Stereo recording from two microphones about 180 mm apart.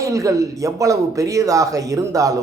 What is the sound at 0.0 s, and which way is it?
Speech, 20° right (ahead or behind).